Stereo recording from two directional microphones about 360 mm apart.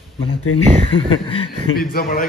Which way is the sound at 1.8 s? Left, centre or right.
Left.